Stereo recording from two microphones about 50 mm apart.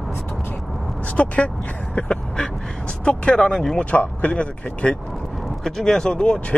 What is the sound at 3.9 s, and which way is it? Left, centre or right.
Speech, left.